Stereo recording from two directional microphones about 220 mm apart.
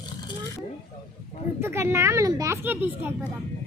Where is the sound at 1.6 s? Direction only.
10° right (ahead or behind).